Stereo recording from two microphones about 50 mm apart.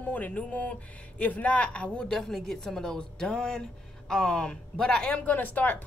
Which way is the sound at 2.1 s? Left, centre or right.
Centre.